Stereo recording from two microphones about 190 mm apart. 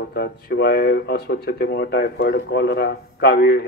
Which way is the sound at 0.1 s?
60° left (ahead or behind).